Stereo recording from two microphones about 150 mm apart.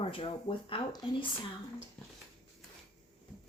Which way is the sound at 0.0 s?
35° left (ahead or behind).